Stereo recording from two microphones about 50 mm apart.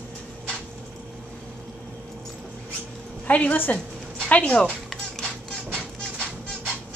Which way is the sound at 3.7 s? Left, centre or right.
Left.